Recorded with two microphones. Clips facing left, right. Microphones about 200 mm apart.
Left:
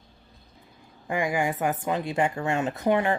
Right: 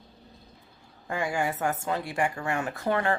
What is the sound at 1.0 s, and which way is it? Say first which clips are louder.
Speech: left 3 dB; 15° left (ahead or behind).